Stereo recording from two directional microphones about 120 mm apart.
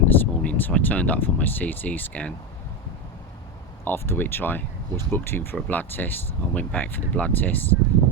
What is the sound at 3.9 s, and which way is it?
Speech, 15° left (ahead or behind).